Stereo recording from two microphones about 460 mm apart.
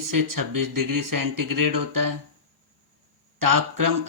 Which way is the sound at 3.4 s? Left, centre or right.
Right.